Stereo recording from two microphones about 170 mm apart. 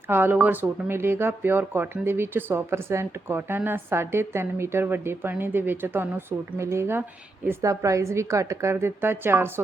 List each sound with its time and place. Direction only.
0.1 s speech: 10° right (ahead or behind)